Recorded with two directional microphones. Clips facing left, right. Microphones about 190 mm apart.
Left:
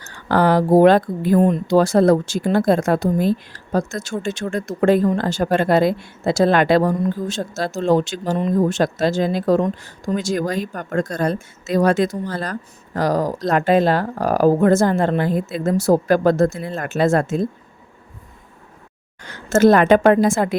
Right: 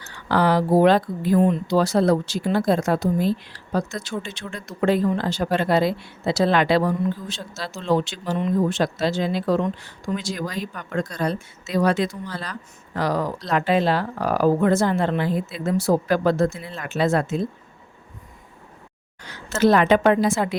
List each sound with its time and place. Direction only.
0.0 s speech: 45° left (ahead or behind)
19.2 s speech: 50° left (ahead or behind)